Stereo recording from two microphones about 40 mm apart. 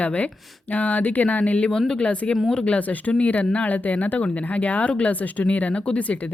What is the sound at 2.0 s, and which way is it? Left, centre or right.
Speech, left.